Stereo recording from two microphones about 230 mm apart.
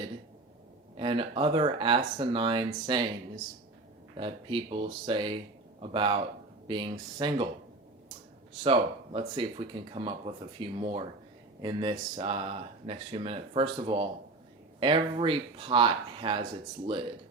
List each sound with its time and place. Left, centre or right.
0.9 s speech: right
8.6 s speech: right